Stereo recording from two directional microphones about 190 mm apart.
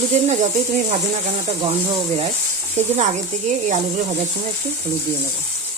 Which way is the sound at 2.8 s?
35° right (ahead or behind).